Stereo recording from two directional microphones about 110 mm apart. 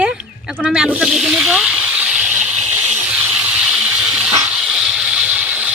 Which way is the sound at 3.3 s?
5° right (ahead or behind).